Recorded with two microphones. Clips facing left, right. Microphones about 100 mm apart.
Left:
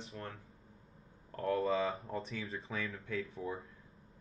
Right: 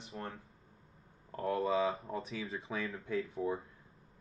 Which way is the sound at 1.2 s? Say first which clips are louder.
Even; 10° right (ahead or behind).